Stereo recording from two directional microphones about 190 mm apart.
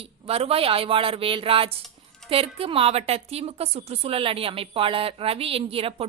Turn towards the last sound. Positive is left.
turn(degrees=-30)  # may be behind; listen again after turning